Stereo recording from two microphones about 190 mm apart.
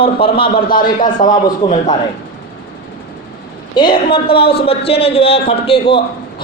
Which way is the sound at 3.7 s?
25° left (ahead or behind).